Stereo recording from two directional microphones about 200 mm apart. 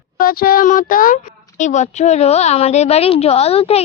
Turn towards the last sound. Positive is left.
turn(degrees=30)  # may be behind; listen again after turning